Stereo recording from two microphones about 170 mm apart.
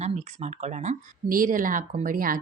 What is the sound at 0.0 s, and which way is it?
Speech, 40° right (ahead or behind).